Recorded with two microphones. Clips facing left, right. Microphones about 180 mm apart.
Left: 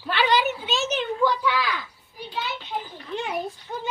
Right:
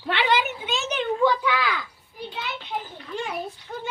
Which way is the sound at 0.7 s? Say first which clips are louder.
Left 2 dB; 60° right (ahead or behind).